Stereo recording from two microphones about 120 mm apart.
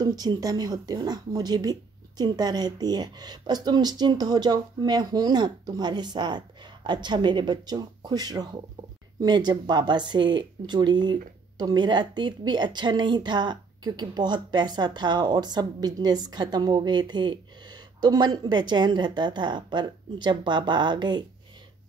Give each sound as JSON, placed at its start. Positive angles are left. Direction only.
{"t": 0.0, "sound": "speech", "side_deg": -35}